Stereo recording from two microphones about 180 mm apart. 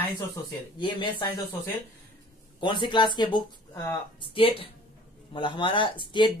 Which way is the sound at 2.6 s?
25° left (ahead or behind).